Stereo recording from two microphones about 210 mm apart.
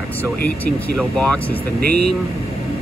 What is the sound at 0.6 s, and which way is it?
Speech, 5° left (ahead or behind).